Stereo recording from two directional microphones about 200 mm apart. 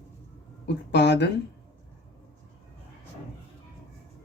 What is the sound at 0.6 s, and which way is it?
Speech, 60° left (ahead or behind).